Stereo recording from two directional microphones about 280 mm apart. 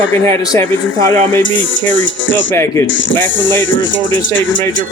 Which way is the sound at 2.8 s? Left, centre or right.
Left.